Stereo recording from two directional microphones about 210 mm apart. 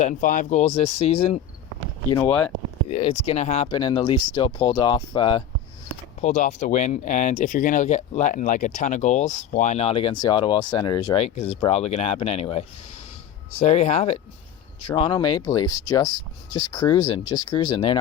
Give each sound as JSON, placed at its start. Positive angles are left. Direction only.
{"t": 0.0, "sound": "speech", "side_deg": 40}
{"t": 6.2, "sound": "speech", "side_deg": 35}